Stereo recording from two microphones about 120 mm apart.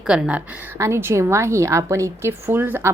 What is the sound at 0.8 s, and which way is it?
A woman's voice, 20° right (ahead or behind).